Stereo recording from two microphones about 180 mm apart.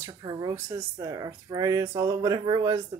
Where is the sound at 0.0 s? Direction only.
20° right (ahead or behind).